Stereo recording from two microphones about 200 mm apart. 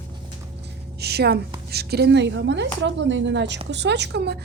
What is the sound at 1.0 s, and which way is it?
A woman's voice, 55° right (ahead or behind).